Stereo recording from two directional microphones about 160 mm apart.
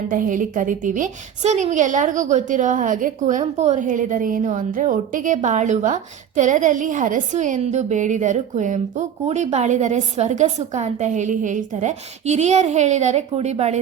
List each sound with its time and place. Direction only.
0.1 s a woman's voice: 55° right (ahead or behind)